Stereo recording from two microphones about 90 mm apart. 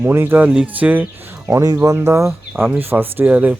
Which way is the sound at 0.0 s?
25° right (ahead or behind).